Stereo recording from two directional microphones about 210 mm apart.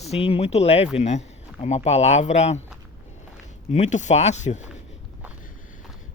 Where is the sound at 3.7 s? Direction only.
35° left (ahead or behind).